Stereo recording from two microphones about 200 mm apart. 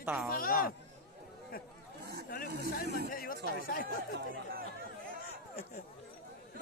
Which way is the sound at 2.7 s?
50° left (ahead or behind).